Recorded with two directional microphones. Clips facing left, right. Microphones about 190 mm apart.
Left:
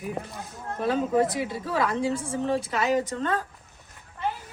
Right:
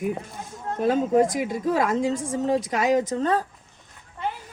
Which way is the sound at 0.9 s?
45° right (ahead or behind).